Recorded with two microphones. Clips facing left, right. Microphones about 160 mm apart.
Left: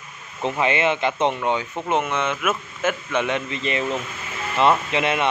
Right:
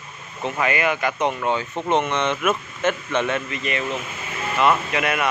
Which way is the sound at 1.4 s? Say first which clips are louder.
Even; 15° left (ahead or behind).